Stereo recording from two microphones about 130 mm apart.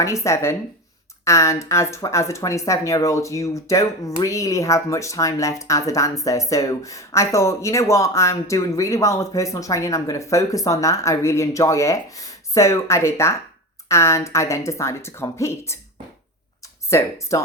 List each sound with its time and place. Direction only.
0.0 s speech: 25° left (ahead or behind)
16.9 s speech: 25° left (ahead or behind)